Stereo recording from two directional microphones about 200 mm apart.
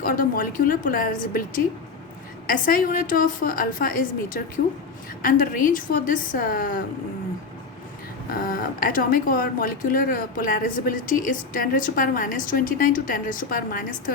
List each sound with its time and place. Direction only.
0.0 s speech: 45° left (ahead or behind)
5.2 s speech: 45° left (ahead or behind)
8.3 s speech: 45° left (ahead or behind)